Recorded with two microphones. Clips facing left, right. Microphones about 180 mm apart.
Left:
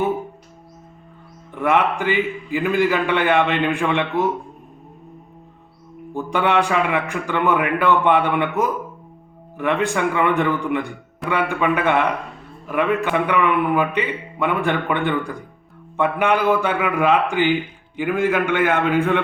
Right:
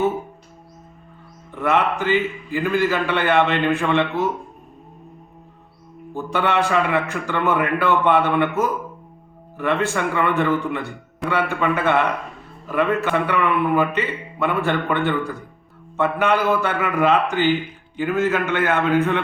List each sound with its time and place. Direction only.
1.6 s a man's voice: 15° left (ahead or behind)
6.1 s a man's voice: 15° left (ahead or behind)